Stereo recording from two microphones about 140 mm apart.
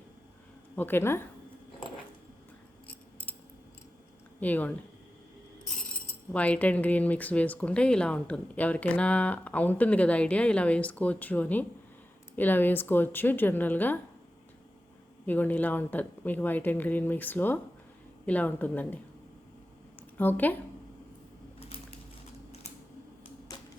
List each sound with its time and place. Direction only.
0.8 s speech: 15° left (ahead or behind)
4.4 s speech: 10° left (ahead or behind)
6.3 s speech: 10° left (ahead or behind)
15.3 s speech: 10° left (ahead or behind)
20.0 s speech: 15° left (ahead or behind)
21.6 s typing: 45° left (ahead or behind)
23.5 s typewriter: 25° left (ahead or behind)